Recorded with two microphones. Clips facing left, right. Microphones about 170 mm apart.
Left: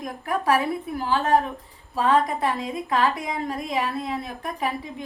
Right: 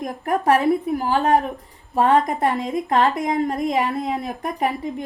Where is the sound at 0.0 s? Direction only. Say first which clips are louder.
Right 5 dB; 50° right (ahead or behind).